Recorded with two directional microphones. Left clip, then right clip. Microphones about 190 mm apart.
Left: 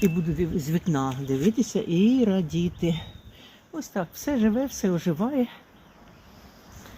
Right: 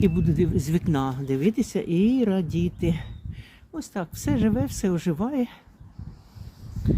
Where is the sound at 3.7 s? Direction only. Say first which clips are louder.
Left 1 dB; 25° right (ahead or behind).